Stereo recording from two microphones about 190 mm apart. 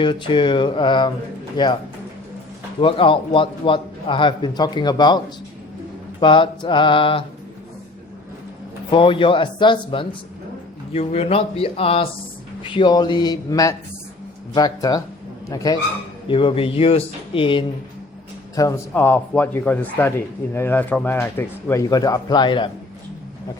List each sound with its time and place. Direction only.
0.0 s a man's voice: 25° left (ahead or behind)
2.8 s a man's voice: 25° left (ahead or behind)
8.9 s a man's voice: 25° left (ahead or behind)
18.5 s speech: 15° left (ahead or behind)